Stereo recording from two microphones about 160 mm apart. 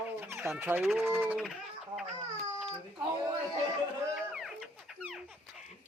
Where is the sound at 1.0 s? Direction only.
10° right (ahead or behind).